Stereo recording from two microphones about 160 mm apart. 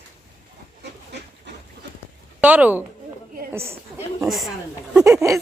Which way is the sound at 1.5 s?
90° right.